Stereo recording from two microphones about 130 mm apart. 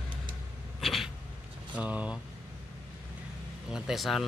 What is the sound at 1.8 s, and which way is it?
Speech, 10° right (ahead or behind).